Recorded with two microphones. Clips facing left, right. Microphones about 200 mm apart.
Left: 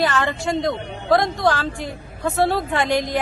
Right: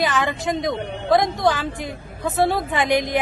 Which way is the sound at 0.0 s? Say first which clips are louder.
Left 1 dB; 15° right (ahead or behind).